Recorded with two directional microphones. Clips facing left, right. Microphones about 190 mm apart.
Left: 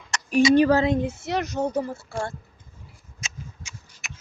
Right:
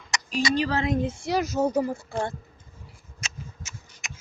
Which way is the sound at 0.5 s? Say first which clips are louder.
Left 9 dB; 55° left (ahead or behind).